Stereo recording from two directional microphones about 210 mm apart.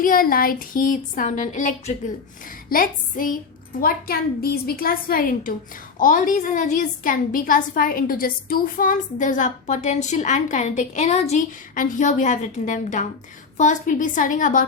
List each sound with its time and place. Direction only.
0.0 s a woman's voice: 40° left (ahead or behind)